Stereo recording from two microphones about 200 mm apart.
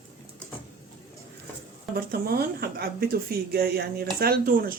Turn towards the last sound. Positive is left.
turn(degrees=-45)  # may be behind; listen again after turning